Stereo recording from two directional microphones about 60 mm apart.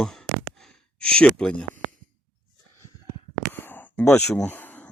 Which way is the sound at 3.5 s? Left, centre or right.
Left.